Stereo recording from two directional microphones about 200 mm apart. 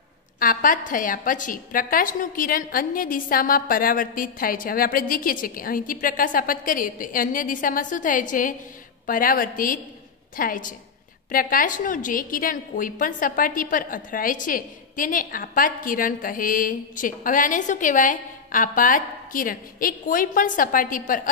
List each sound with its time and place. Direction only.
0.4 s a woman's voice: 45° left (ahead or behind)